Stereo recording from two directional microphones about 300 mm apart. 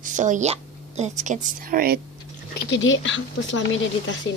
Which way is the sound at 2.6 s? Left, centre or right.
Left.